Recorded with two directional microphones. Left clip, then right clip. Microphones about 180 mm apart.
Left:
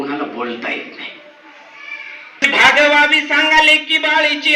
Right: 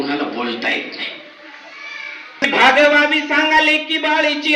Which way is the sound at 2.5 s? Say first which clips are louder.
Left 1 dB; 35° right (ahead or behind).